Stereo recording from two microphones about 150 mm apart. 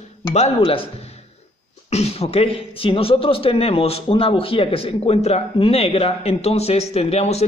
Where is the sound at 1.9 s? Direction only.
45° left (ahead or behind).